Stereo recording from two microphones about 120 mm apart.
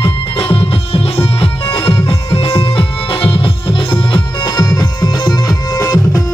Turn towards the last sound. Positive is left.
turn(degrees=30)  # may be behind; listen again after turning